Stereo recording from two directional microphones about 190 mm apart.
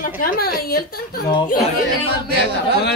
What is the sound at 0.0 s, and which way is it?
A woman's voice, 50° left (ahead or behind).